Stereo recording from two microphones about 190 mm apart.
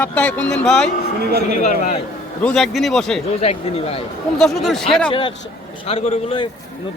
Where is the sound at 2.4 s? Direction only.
5° left (ahead or behind).